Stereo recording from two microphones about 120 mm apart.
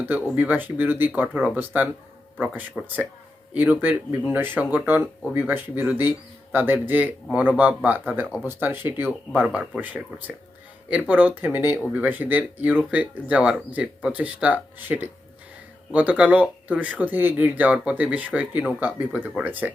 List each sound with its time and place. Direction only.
0.3 s speech: 15° right (ahead or behind)
2.8 s speech: centre (ahead or behind)
3.5 s speech: 15° right (ahead or behind)